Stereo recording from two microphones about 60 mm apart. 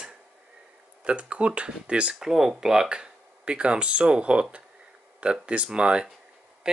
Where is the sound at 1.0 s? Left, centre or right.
Centre.